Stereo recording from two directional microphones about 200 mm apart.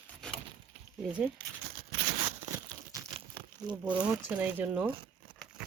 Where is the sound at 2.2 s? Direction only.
15° right (ahead or behind).